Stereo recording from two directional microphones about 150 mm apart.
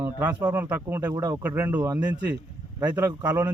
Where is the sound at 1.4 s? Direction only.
10° right (ahead or behind).